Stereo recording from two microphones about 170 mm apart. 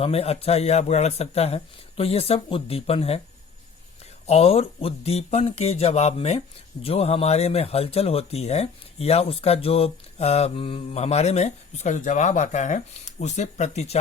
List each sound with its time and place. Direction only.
0.0 s speech: 35° left (ahead or behind)
4.3 s speech: 35° left (ahead or behind)